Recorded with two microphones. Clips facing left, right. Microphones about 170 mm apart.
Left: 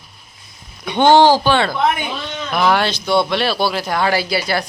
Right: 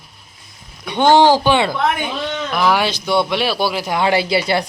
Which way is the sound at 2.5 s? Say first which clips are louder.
Left 1 dB; 5° right (ahead or behind).